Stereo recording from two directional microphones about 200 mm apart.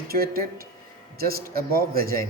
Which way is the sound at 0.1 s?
50° right (ahead or behind).